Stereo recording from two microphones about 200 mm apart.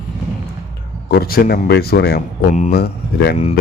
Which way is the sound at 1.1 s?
50° left (ahead or behind).